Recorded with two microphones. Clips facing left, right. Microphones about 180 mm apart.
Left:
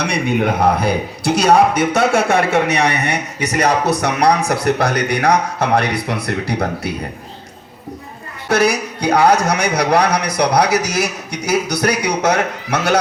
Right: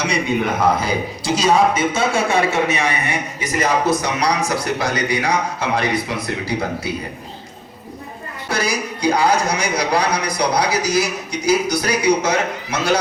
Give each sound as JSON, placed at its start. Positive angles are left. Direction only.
{"t": 0.7, "sound": "a man's voice", "side_deg": 65}
{"t": 8.4, "sound": "a man's voice", "side_deg": 65}